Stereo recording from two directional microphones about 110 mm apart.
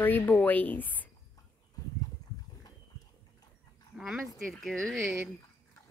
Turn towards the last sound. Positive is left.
turn(degrees=0)  # may be behind; listen again after turning